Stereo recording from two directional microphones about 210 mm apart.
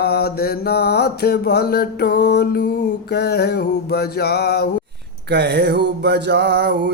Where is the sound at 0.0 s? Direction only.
50° left (ahead or behind).